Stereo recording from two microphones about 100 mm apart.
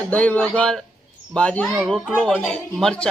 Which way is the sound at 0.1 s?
15° left (ahead or behind).